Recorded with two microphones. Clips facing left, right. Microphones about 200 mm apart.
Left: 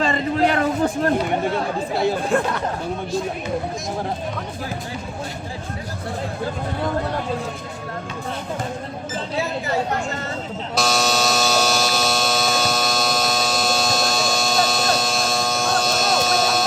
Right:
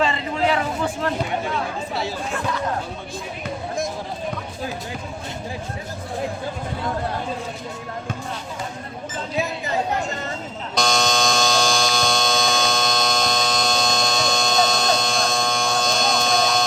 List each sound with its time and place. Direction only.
0.0 s a sound: 45° left (ahead or behind)
2.0 s speech: 55° left (ahead or behind)
10.8 s buzzer: 5° left (ahead or behind)